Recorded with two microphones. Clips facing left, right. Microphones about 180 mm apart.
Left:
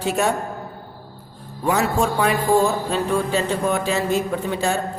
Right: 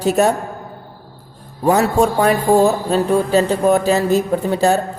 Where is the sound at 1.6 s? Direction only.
40° right (ahead or behind).